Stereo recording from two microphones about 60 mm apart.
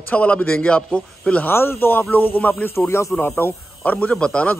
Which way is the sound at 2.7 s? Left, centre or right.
Left.